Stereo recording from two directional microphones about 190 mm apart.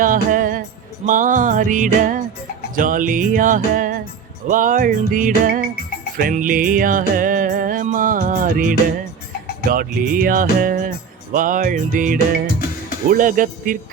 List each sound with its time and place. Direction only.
0.0 s music: 45° right (ahead or behind)